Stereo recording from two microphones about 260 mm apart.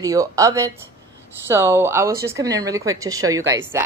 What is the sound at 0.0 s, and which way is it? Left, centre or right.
A woman's voice, centre.